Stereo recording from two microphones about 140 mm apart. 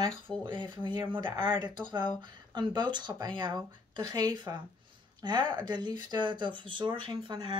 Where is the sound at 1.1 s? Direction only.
35° right (ahead or behind).